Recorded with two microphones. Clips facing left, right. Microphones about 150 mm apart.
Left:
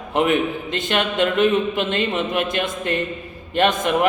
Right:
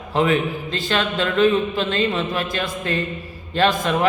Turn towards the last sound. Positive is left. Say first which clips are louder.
# left 1 dB
turn(degrees=20)  # may be behind; listen again after turning